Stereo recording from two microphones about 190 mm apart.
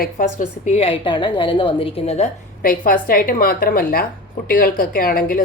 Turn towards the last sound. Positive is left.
turn(degrees=50)  # may be behind; listen again after turning